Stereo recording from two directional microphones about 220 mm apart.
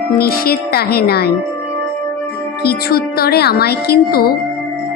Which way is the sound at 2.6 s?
45° left (ahead or behind).